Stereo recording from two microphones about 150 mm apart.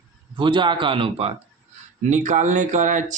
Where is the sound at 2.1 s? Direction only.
55° right (ahead or behind).